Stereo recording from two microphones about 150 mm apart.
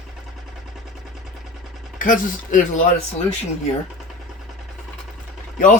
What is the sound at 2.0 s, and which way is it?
Speech, 65° left (ahead or behind).